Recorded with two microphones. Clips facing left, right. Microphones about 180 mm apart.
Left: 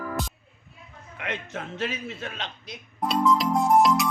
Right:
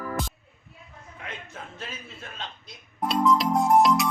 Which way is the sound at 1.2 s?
75° left (ahead or behind).